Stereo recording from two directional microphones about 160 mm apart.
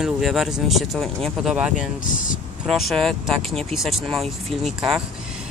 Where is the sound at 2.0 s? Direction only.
55° left (ahead or behind).